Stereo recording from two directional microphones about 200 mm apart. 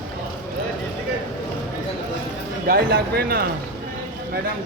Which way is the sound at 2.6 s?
50° right (ahead or behind).